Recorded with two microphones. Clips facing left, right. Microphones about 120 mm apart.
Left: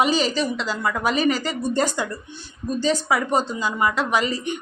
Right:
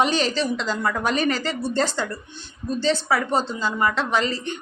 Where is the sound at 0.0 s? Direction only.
5° left (ahead or behind).